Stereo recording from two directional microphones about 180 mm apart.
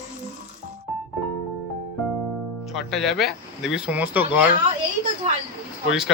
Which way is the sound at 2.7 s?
Centre (ahead or behind).